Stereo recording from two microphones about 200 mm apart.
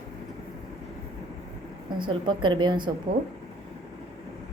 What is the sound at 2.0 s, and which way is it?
Speech, 25° right (ahead or behind).